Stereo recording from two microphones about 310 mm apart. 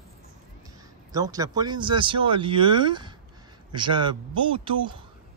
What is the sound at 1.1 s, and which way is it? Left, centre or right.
Speech, centre.